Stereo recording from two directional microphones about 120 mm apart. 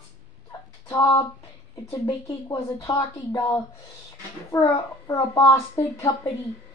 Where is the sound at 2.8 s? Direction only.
30° left (ahead or behind).